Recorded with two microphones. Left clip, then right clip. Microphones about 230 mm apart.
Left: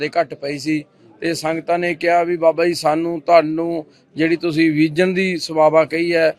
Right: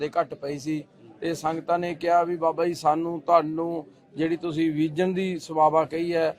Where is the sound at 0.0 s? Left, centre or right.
Left.